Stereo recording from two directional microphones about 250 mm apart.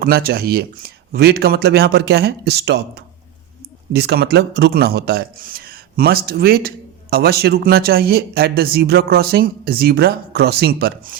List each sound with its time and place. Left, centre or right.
0.0 s speech: right